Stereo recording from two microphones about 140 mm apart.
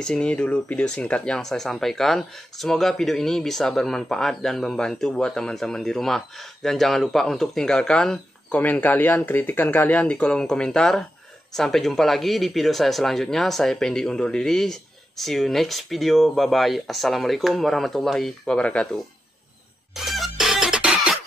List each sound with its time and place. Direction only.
0.0 s speech: 5° left (ahead or behind)
19.9 s music: centre (ahead or behind)